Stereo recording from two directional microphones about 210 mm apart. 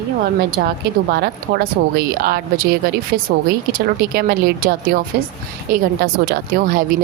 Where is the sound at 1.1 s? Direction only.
50° right (ahead or behind).